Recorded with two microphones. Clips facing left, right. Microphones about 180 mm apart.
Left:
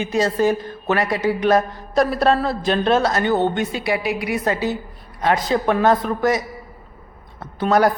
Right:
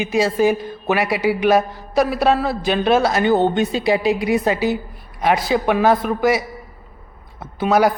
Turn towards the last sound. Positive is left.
turn(degrees=-5)  # may be behind; listen again after turning